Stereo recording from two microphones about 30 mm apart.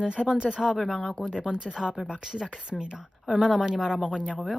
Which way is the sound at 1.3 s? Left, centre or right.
Right.